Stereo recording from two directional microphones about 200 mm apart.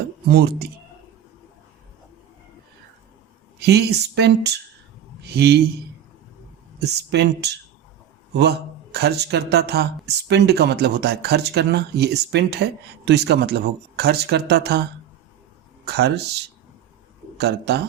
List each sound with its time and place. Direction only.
0.3 s speech: 55° right (ahead or behind)
3.6 s a man's voice: 55° right (ahead or behind)
6.7 s a man's voice: 55° right (ahead or behind)
15.9 s a man's voice: 55° right (ahead or behind)